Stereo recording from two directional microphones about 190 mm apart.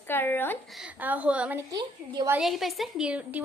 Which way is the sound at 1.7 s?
20° right (ahead or behind).